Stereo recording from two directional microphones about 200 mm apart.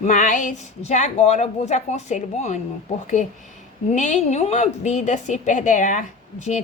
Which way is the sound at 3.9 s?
35° left (ahead or behind).